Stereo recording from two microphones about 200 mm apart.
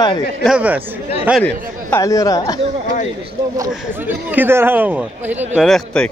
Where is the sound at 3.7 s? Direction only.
10° right (ahead or behind).